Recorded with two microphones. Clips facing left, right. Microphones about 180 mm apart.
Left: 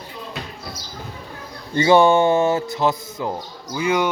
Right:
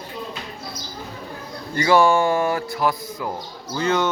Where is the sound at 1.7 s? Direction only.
25° left (ahead or behind).